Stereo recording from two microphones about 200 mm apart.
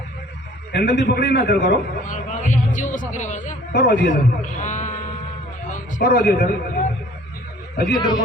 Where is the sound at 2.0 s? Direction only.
40° left (ahead or behind).